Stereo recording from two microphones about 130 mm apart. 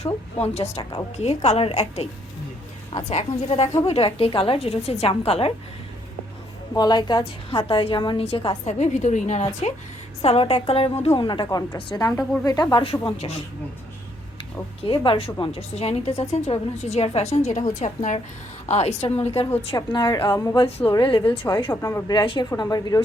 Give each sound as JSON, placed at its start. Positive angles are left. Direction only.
{"t": 0.0, "sound": "a woman's voice", "side_deg": 55}
{"t": 0.8, "sound": "a woman's voice", "side_deg": 35}
{"t": 1.2, "sound": "a woman's voice", "side_deg": 55}
{"t": 6.7, "sound": "a woman's voice", "side_deg": 35}
{"t": 11.2, "sound": "a woman's voice", "side_deg": 35}
{"t": 11.4, "sound": "speech", "side_deg": 25}
{"t": 12.7, "sound": "a woman's voice", "side_deg": 45}
{"t": 14.8, "sound": "a woman's voice", "side_deg": 45}
{"t": 19.7, "sound": "a woman's voice", "side_deg": 35}
{"t": 20.3, "sound": "speech", "side_deg": 25}
{"t": 20.6, "sound": "a woman's voice", "side_deg": 50}
{"t": 20.9, "sound": "a woman's voice", "side_deg": 40}
{"t": 21.7, "sound": "speech", "side_deg": 25}